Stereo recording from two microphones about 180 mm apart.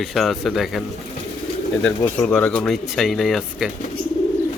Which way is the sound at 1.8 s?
5° left (ahead or behind).